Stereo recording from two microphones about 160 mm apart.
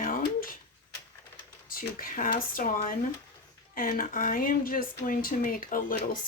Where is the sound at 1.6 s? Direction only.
60° left (ahead or behind).